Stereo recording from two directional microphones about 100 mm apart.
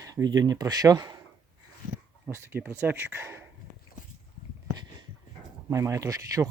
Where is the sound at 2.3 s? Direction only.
25° right (ahead or behind).